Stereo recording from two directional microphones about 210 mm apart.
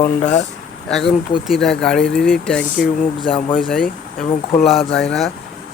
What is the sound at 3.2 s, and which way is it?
Speech, 25° left (ahead or behind).